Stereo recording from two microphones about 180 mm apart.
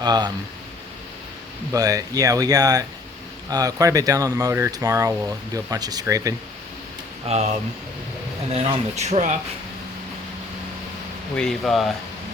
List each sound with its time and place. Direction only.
0.0 s speech: 25° right (ahead or behind)
1.7 s speech: 20° right (ahead or behind)
7.3 s speech: 40° right (ahead or behind)
8.5 s speech: 35° right (ahead or behind)
11.3 s speech: 5° left (ahead or behind)